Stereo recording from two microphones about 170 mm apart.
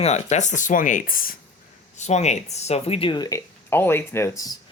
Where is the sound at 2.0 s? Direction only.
40° left (ahead or behind); by 3.4 s 25° left (ahead or behind).